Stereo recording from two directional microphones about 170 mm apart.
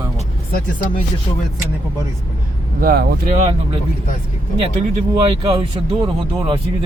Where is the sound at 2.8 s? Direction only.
60° right (ahead or behind).